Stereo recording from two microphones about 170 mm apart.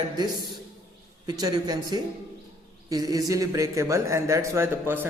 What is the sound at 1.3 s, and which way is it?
Speech, 25° right (ahead or behind).